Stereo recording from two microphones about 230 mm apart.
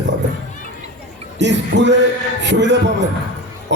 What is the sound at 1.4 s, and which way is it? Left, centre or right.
A man's voice, right.